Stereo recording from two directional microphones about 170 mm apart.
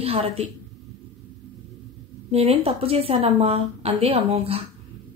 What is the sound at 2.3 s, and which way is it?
A woman's voice, 35° right (ahead or behind).